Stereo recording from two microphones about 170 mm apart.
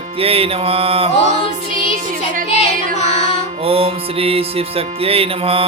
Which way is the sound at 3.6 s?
35° right (ahead or behind).